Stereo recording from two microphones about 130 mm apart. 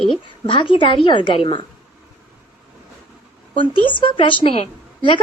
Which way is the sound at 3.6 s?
40° left (ahead or behind).